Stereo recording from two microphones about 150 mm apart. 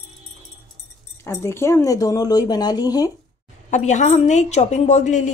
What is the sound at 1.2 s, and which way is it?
Speech, 15° left (ahead or behind).